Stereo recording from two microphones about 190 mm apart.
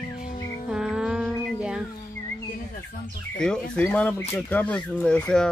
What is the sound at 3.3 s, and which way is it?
Speech, 5° left (ahead or behind).